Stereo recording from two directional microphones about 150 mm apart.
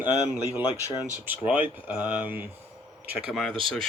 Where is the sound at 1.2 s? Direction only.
10° right (ahead or behind).